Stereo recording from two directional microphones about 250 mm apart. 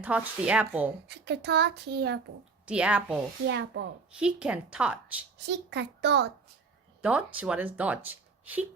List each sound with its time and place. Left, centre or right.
0.0 s a woman's voice: centre
1.0 s speech: right
2.6 s a woman's voice: centre
3.4 s a child's voice: right
4.1 s a woman's voice: centre
5.5 s a child's voice: right
7.0 s a woman's voice: centre